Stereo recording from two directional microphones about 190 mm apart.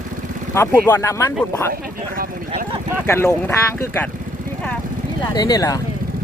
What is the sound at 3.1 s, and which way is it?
Speech, 15° left (ahead or behind).